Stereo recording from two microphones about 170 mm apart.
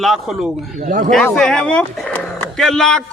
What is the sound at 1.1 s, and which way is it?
Speech, 5° left (ahead or behind).